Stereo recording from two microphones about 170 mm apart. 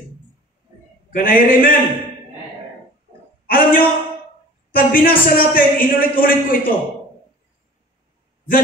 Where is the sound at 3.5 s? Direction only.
55° left (ahead or behind).